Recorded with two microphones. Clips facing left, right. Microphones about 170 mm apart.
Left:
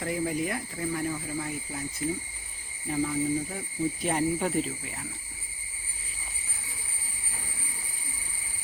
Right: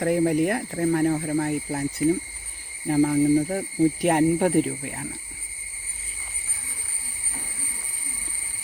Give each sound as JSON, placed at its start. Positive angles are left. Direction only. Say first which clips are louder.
{"t": 0.0, "sound": "speech", "louder": "right 9 dB", "side_deg": -65}